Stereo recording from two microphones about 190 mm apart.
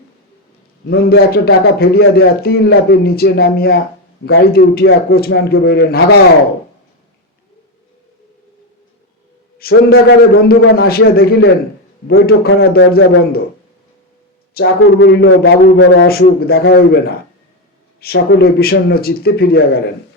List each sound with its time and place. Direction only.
1.3 s speech: 55° left (ahead or behind)
9.6 s speech: 55° left (ahead or behind)
14.5 s speech: 55° left (ahead or behind)
18.0 s speech: 55° left (ahead or behind)